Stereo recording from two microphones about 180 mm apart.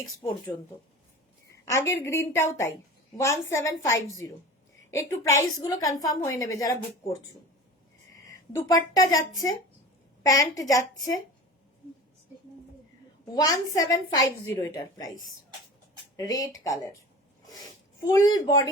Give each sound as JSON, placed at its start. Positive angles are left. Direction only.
{"t": 1.7, "sound": "a woman's voice", "side_deg": 15}
{"t": 8.3, "sound": "a woman's voice", "side_deg": 20}
{"t": 10.2, "sound": "a woman's voice", "side_deg": 20}
{"t": 13.3, "sound": "a woman's voice", "side_deg": 20}
{"t": 16.1, "sound": "a woman's voice", "side_deg": 20}
{"t": 18.0, "sound": "a woman's voice", "side_deg": 20}